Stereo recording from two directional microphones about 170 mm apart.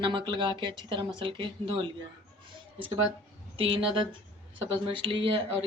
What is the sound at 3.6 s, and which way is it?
Speech, 30° right (ahead or behind).